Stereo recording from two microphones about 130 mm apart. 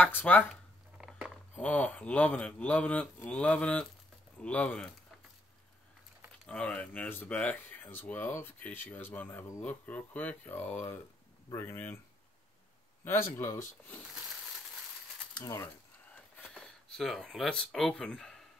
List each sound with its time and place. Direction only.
0.0 s speech: 15° left (ahead or behind)
0.5 s a sound: 5° right (ahead or behind)
1.6 s speech: 10° left (ahead or behind)
6.4 s speech: 5° left (ahead or behind)
13.0 s speech: 20° left (ahead or behind)
15.3 s speech: 25° left (ahead or behind)
16.4 s speech: 5° left (ahead or behind)